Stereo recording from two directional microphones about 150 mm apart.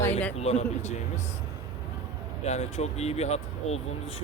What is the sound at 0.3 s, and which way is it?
Speech, 45° left (ahead or behind).